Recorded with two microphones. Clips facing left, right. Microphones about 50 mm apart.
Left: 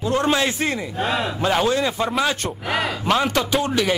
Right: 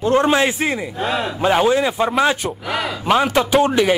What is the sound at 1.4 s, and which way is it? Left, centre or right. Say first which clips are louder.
Speech: right 5 dB; centre.